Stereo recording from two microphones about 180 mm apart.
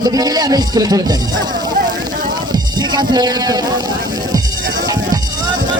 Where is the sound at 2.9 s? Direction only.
25° right (ahead or behind).